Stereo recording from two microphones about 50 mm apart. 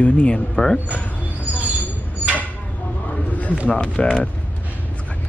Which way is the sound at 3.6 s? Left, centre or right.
Left.